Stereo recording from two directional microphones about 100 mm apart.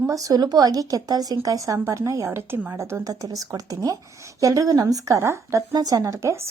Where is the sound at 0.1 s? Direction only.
35° right (ahead or behind).